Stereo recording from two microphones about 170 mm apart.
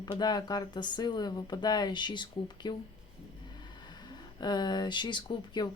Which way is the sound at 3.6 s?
25° left (ahead or behind).